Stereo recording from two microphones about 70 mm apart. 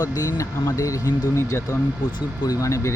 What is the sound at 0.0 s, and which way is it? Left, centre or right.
Speech, left.